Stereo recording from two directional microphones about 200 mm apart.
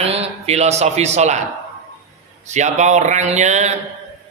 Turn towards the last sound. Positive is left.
turn(degrees=-35)  # may be behind; listen again after turning